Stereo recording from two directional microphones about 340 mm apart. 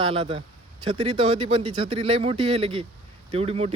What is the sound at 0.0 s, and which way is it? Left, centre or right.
Speech, centre.